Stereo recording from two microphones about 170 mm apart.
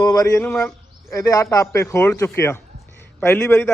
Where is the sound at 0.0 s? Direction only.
20° left (ahead or behind).